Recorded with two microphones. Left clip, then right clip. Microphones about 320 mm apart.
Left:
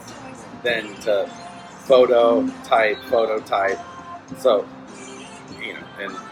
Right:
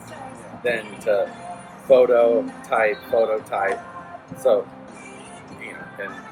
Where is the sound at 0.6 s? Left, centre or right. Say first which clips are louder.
Left 1 dB; centre.